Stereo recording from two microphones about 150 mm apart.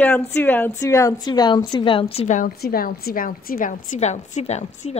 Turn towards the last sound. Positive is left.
turn(degrees=50)  # may be behind; listen again after turning